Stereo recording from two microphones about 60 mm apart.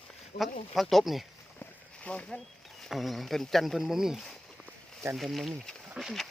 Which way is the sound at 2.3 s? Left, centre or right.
Centre.